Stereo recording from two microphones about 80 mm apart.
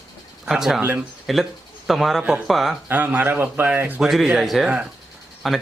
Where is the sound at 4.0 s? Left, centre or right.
Centre.